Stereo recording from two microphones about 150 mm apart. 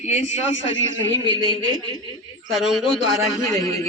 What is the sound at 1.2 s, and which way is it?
Speech, 30° right (ahead or behind).